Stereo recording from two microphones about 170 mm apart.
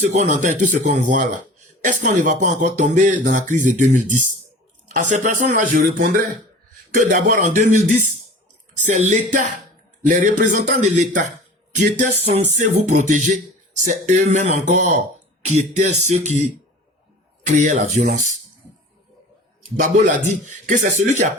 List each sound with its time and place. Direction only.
0.0 s speech: 45° right (ahead or behind)
19.8 s speech: 50° right (ahead or behind)